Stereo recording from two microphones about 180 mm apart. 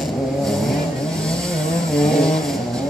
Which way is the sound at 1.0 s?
5° left (ahead or behind).